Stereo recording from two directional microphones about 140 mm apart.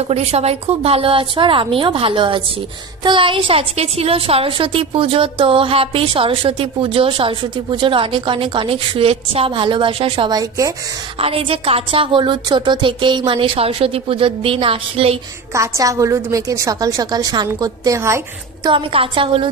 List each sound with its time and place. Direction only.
0.1 s a woman's voice: 50° right (ahead or behind)
15.5 s a woman's voice: 20° right (ahead or behind)
18.7 s a woman's voice: 40° right (ahead or behind)